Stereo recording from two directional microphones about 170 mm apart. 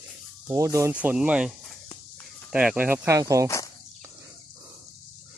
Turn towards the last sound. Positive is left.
turn(degrees=-20)  # may be behind; listen again after turning